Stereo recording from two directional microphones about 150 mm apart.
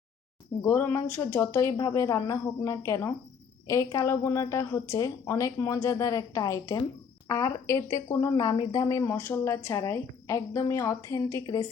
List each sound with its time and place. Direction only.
0.6 s a woman's voice: 15° left (ahead or behind)